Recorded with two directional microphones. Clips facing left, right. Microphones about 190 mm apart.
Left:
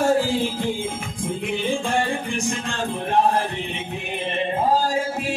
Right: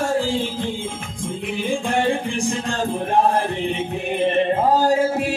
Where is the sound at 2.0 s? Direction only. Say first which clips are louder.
Right 4 dB; 30° right (ahead or behind).